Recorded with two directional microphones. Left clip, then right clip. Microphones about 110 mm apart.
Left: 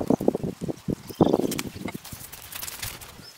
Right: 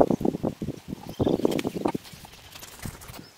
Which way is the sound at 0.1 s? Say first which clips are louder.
Left 1 dB; 45° left (ahead or behind).